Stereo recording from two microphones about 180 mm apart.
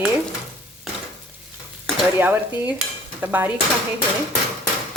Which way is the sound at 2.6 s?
10° right (ahead or behind).